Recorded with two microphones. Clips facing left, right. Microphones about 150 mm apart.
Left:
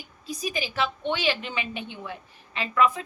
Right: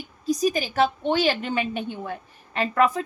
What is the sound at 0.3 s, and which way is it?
A woman's voice, 40° right (ahead or behind).